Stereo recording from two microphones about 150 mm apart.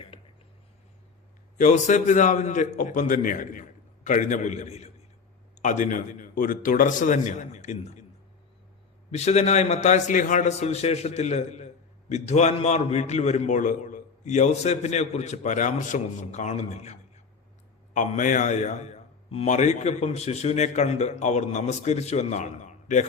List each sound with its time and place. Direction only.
1.5 s a man's voice: 55° left (ahead or behind)
9.1 s a man's voice: 45° left (ahead or behind)